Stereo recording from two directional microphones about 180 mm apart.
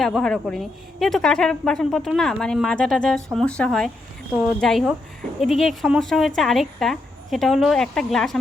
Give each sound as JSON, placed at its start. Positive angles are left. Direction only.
{"t": 0.0, "sound": "a woman's voice", "side_deg": 0}